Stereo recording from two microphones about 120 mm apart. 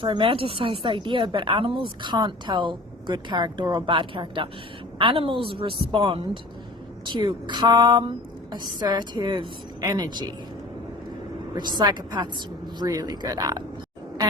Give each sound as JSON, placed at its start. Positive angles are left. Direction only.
{"t": 0.0, "sound": "speech", "side_deg": -45}
{"t": 7.0, "sound": "a woman's voice", "side_deg": -40}
{"t": 11.5, "sound": "a woman's voice", "side_deg": -35}